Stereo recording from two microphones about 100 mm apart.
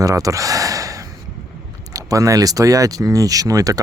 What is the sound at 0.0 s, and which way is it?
Speech, 35° right (ahead or behind).